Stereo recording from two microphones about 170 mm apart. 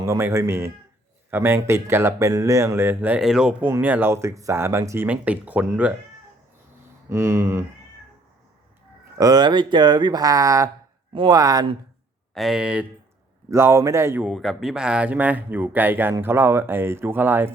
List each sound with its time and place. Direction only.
0.0 s speech: 15° right (ahead or behind)
7.1 s speech: 15° right (ahead or behind)
9.1 s speech: 20° right (ahead or behind)
12.3 s speech: centre (ahead or behind)
13.5 s speech: 15° right (ahead or behind)
14.3 s speech: centre (ahead or behind)